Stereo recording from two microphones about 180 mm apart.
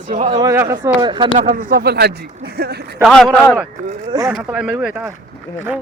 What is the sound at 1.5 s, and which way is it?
Speech, 50° right (ahead or behind).